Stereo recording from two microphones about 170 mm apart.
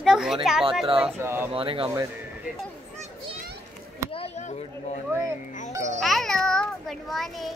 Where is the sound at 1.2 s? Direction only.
15° right (ahead or behind).